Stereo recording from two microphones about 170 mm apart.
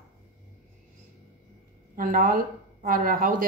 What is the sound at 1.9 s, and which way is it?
A woman's voice, 55° right (ahead or behind).